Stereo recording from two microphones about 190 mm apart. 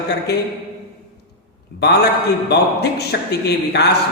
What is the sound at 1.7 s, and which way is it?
A man's voice, 60° left (ahead or behind).